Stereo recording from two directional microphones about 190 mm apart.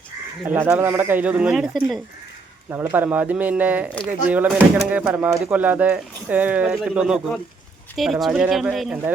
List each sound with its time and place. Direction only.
0.4 s speech: 10° right (ahead or behind)
2.6 s speech: 15° right (ahead or behind)